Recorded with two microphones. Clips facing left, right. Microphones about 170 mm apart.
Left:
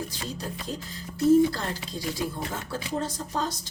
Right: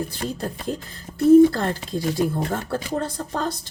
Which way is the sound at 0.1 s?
55° right (ahead or behind).